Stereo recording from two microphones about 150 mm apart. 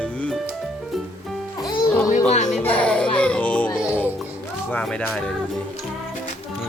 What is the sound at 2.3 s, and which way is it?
Speech, 50° left (ahead or behind).